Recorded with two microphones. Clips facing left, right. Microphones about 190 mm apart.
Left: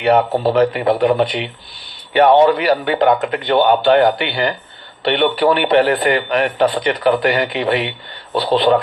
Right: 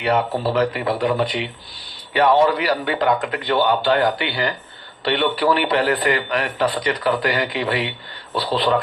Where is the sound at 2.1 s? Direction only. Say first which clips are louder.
Left 5 dB; 25° left (ahead or behind).